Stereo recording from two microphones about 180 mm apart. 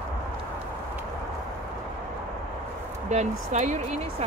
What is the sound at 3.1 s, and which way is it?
Speech, 40° right (ahead or behind).